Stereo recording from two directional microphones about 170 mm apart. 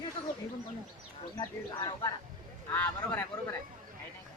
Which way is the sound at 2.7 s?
10° left (ahead or behind).